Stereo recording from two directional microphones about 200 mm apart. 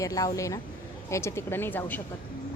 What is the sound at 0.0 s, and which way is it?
Speech, 15° left (ahead or behind).